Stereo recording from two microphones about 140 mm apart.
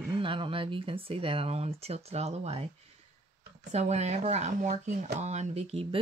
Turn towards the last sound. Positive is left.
turn(degrees=-45)  # may be behind; listen again after turning